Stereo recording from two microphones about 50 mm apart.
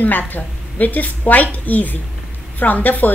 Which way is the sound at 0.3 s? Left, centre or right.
Left.